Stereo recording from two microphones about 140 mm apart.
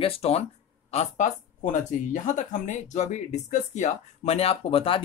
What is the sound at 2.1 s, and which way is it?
Speech, 60° left (ahead or behind).